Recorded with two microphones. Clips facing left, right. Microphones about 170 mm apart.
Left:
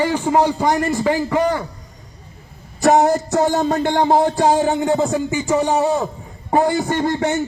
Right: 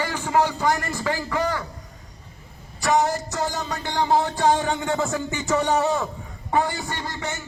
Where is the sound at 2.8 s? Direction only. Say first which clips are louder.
Left 7 dB; 50° left (ahead or behind); by 6.1 s 30° left (ahead or behind).